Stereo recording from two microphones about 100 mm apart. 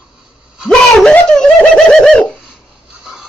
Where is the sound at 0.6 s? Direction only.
5° left (ahead or behind).